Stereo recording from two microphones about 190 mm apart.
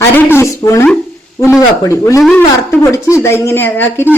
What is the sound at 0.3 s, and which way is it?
Speech, 15° left (ahead or behind).